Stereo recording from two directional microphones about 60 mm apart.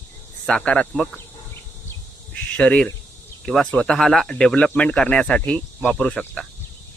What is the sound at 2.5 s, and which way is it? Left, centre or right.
Speech, left.